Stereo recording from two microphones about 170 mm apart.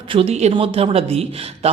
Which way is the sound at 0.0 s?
30° right (ahead or behind).